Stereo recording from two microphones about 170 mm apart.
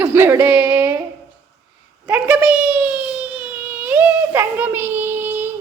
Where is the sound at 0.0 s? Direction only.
15° right (ahead or behind).